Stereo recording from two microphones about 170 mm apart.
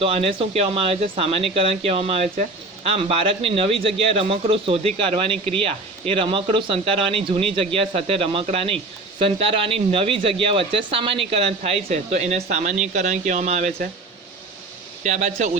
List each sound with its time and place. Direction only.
0.0 s a man's voice: 35° right (ahead or behind)
15.0 s speech: 45° right (ahead or behind)